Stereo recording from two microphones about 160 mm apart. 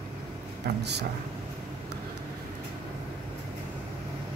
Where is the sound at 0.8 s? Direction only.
90° right.